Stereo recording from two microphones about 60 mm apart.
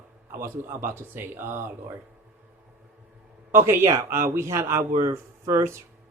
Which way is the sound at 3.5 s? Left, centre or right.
Right.